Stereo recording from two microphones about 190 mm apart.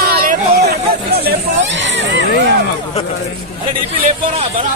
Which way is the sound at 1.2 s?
75° right (ahead or behind).